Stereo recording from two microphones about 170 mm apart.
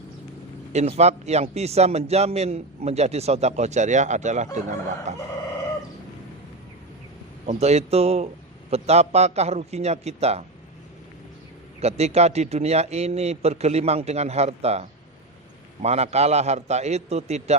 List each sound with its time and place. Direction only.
0.7 s a man's voice: 40° right (ahead or behind)
5.1 s crowing: 40° right (ahead or behind)
7.4 s a man's voice: 40° right (ahead or behind)
11.8 s a man's voice: 40° right (ahead or behind)